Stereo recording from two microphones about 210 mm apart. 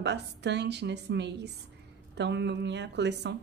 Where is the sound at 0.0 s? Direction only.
55° right (ahead or behind).